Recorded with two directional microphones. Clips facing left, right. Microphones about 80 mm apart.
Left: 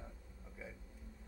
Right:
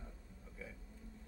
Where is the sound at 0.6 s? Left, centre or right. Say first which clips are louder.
Left 1 dB; centre.